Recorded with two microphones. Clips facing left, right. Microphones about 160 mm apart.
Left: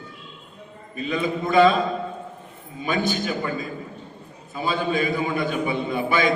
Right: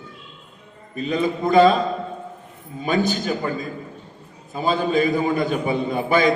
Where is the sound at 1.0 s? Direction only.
40° right (ahead or behind).